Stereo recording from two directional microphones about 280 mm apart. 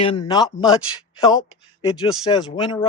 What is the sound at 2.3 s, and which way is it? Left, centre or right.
Speech, centre.